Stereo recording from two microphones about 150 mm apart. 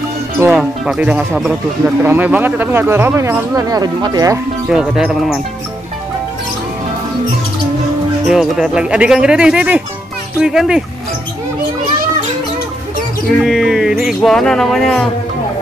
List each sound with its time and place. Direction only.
0.4 s speech: 5° right (ahead or behind); by 4.4 s 25° right (ahead or behind)
4.6 s speech: 5° right (ahead or behind)
8.3 s speech: 5° right (ahead or behind)
13.4 s speech: centre (ahead or behind)